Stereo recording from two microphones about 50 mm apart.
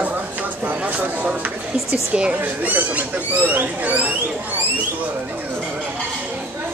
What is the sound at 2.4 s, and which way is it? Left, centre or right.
Speech, right.